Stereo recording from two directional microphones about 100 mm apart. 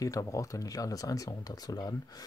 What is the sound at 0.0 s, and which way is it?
Speech, 35° left (ahead or behind).